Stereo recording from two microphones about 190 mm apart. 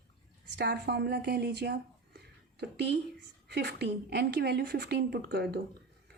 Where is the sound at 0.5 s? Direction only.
60° right (ahead or behind).